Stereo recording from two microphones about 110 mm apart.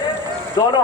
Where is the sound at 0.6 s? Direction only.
35° left (ahead or behind).